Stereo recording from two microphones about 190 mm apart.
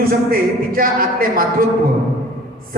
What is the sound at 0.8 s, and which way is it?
Speech, 50° right (ahead or behind).